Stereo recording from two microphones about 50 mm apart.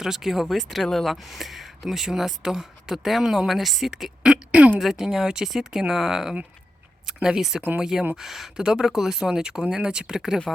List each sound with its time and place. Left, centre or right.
0.0 s a woman's voice: centre
3.9 s speech: centre
4.8 s a woman's voice: centre
10.2 s speech: centre